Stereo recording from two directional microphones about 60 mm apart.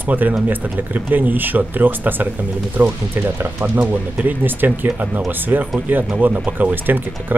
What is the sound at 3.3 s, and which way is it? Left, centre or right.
Speech, right.